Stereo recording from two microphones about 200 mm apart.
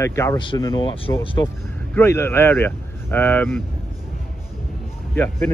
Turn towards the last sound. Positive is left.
turn(degrees=10)  # may be behind; listen again after turning